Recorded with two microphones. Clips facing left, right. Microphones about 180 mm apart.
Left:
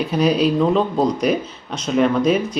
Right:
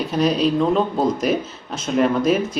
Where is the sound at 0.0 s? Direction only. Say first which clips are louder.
Left 2 dB; centre (ahead or behind).